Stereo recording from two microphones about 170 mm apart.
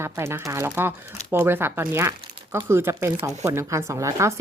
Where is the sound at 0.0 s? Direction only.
15° right (ahead or behind).